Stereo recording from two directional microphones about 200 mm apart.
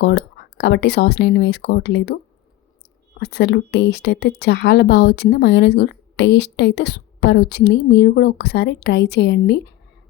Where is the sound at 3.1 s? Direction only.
55° left (ahead or behind).